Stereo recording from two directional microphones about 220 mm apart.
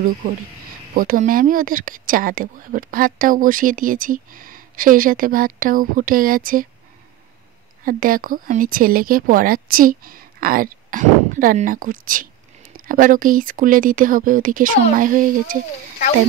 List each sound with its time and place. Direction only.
0.9 s speech: 35° right (ahead or behind)
7.8 s speech: 40° right (ahead or behind)